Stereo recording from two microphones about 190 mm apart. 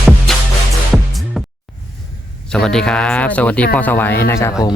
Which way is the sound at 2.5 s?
5° left (ahead or behind).